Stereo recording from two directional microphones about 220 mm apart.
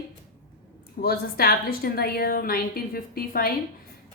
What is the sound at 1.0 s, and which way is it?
A woman's voice, 45° left (ahead or behind).